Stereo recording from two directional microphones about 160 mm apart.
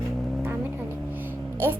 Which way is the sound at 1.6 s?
15° right (ahead or behind).